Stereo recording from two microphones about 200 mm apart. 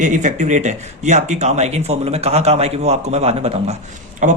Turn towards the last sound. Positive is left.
turn(degrees=-35)  # may be behind; listen again after turning